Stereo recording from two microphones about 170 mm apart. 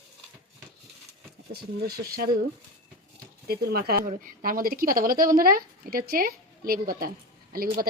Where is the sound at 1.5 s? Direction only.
65° right (ahead or behind).